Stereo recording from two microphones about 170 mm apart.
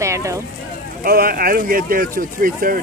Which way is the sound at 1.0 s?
60° right (ahead or behind).